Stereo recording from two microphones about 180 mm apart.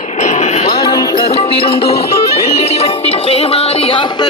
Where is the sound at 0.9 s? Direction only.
25° left (ahead or behind).